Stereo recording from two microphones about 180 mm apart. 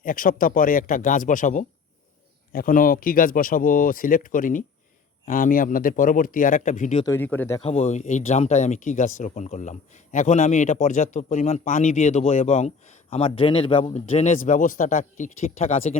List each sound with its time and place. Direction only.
0.0 s speech: 50° left (ahead or behind)
7.0 s speech: 15° left (ahead or behind)
7.6 s speech: 40° left (ahead or behind)